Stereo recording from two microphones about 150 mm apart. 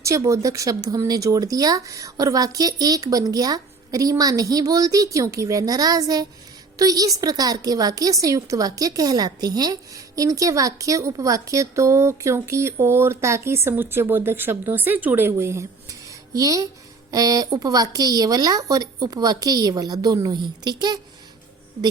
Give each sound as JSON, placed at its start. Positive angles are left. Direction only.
{"t": 0.0, "sound": "a woman's voice", "side_deg": -20}